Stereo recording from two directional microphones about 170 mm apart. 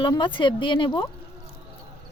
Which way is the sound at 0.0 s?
30° left (ahead or behind).